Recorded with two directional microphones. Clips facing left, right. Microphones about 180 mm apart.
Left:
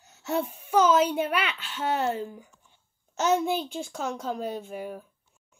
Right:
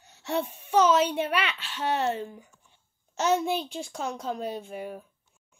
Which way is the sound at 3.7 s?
45° left (ahead or behind).